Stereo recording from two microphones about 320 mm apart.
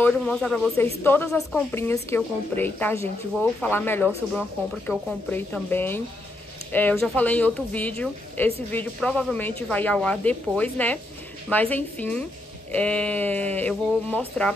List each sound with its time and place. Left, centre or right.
0.0 s a woman's voice: centre